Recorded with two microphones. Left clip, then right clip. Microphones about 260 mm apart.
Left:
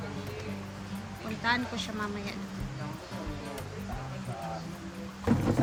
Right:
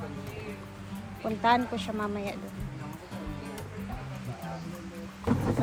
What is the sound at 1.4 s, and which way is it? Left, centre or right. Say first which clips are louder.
Speech: right 5 dB; centre.